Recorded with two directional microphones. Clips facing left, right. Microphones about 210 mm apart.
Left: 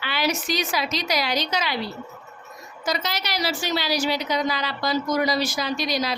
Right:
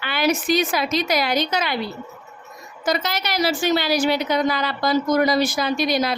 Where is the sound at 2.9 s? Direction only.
55° right (ahead or behind).